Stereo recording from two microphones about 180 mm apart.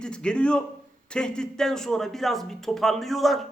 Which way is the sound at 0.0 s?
5° left (ahead or behind).